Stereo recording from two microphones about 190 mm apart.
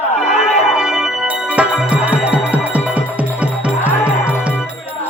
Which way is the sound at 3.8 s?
10° left (ahead or behind).